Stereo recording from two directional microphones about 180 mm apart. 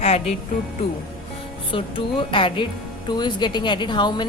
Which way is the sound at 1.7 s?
30° left (ahead or behind).